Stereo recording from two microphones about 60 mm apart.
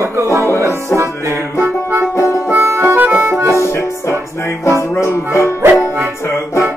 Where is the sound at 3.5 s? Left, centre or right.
Left.